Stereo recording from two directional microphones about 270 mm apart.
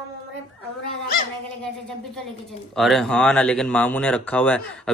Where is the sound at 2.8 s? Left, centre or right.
Centre.